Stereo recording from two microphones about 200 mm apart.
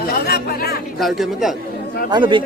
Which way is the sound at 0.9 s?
Centre (ahead or behind).